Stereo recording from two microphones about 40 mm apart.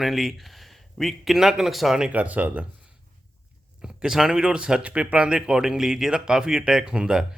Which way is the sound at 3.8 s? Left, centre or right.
Centre.